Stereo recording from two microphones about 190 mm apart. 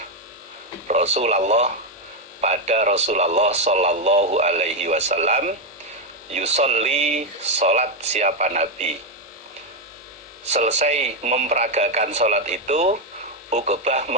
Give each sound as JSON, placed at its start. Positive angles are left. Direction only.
{"t": 0.9, "sound": "speech", "side_deg": -35}
{"t": 10.5, "sound": "speech", "side_deg": -35}